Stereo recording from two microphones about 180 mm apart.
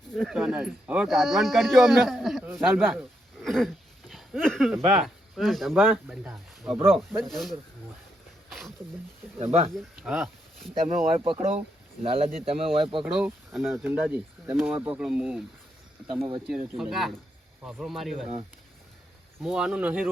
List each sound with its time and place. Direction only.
0.1 s speech: centre (ahead or behind)
3.4 s throat clearing: centre (ahead or behind)
4.1 s speech: centre (ahead or behind)
8.4 s a sound: centre (ahead or behind)
9.4 s speech: 35° right (ahead or behind)
10.0 s speech: 5° right (ahead or behind)
10.8 s speech: 30° right (ahead or behind)
13.1 s speech: 5° right (ahead or behind)
19.4 s speech: 5° right (ahead or behind)